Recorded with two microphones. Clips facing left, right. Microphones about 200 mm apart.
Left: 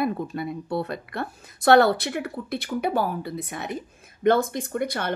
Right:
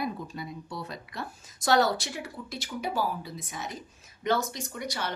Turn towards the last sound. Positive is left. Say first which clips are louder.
# left 8 dB
turn(degrees=55)  # may be behind; listen again after turning